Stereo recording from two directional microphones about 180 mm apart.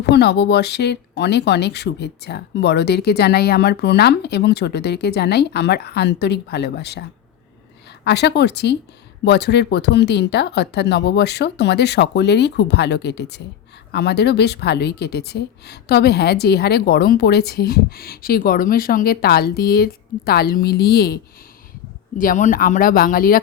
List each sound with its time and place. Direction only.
0.1 s speech: 70° left (ahead or behind)
8.0 s speech: 70° left (ahead or behind)
22.2 s speech: 45° left (ahead or behind)